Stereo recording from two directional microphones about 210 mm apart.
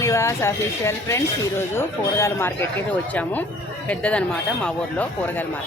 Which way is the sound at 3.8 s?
5° left (ahead or behind).